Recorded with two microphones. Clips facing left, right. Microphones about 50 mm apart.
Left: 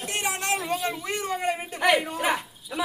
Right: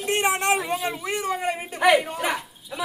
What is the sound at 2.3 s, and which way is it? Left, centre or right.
Dog, centre.